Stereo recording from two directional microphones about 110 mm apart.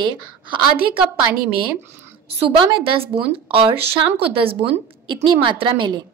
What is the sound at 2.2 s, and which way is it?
A woman's voice, 55° right (ahead or behind).